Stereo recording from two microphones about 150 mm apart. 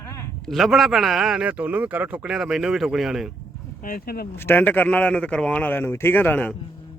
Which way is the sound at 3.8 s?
70° left (ahead or behind).